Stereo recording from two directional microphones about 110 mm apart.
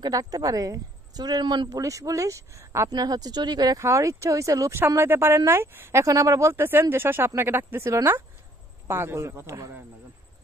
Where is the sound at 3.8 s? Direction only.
25° right (ahead or behind).